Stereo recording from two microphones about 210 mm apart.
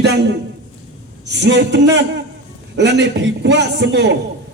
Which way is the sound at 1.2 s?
55° right (ahead or behind).